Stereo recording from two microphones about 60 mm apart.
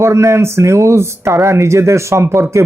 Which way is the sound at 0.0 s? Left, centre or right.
Right.